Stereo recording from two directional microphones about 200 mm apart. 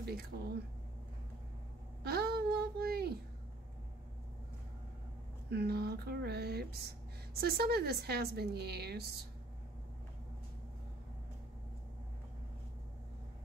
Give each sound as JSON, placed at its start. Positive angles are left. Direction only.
{"t": 0.3, "sound": "a woman's voice", "side_deg": -50}
{"t": 2.0, "sound": "a sound", "side_deg": -50}
{"t": 5.5, "sound": "a woman's voice", "side_deg": -55}